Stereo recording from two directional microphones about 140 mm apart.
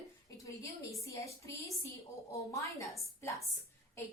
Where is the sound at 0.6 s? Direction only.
20° left (ahead or behind).